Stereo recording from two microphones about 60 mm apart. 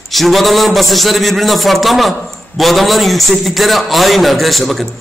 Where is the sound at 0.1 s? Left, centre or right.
Centre.